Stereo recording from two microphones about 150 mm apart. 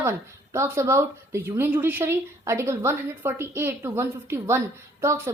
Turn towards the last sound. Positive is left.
turn(degrees=-20)  # may be behind; listen again after turning